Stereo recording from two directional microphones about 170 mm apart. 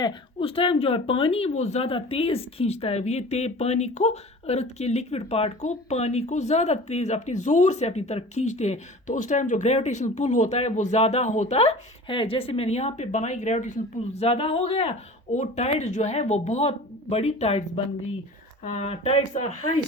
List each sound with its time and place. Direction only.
0.0 s speech: 30° left (ahead or behind)
18.6 s speech: 40° left (ahead or behind)